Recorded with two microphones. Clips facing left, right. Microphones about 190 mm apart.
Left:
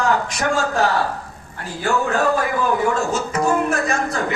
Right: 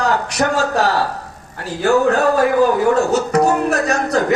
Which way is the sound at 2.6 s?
40° right (ahead or behind).